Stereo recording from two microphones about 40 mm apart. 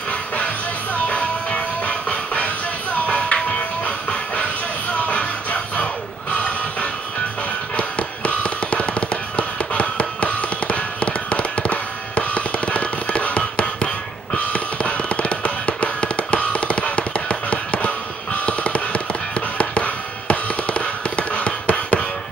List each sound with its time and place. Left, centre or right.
1.0 s music: left
14.3 s fireworks: left
18.4 s tap: left
19.6 s music: left